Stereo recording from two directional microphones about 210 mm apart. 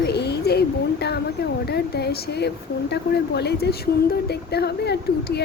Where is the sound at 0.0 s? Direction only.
50° left (ahead or behind).